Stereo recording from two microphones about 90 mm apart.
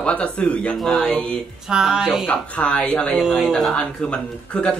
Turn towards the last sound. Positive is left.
turn(degrees=10)  # may be behind; listen again after turning